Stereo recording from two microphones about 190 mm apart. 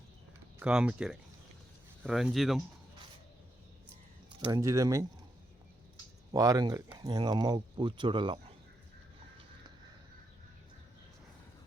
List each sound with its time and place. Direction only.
0.6 s speech: 5° right (ahead or behind)
4.3 s speech: 25° right (ahead or behind)
6.3 s speech: 20° right (ahead or behind)